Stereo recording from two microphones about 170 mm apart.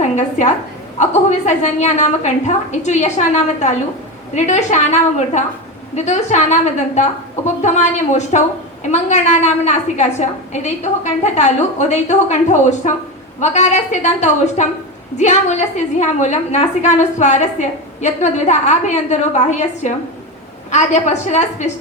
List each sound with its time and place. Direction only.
0.0 s a woman's voice: 45° left (ahead or behind)